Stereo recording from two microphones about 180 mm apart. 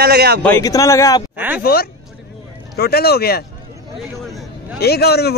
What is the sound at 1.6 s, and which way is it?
Speech, 60° left (ahead or behind).